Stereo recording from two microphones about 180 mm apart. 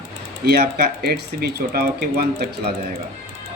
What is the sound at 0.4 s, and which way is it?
Speech, 65° right (ahead or behind).